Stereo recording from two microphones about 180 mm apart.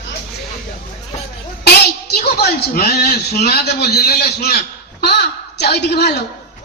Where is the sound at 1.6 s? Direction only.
65° left (ahead or behind).